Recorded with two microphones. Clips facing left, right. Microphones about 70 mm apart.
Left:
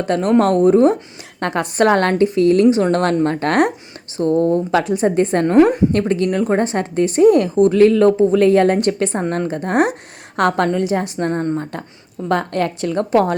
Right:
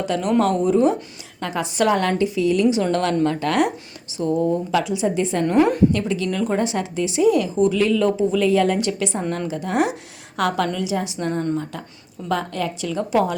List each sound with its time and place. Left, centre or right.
0.0 s a woman's voice: left
1.4 s a woman's voice: left
5.5 s a woman's voice: centre
5.9 s a woman's voice: left
6.2 s a woman's voice: left
12.3 s a woman's voice: left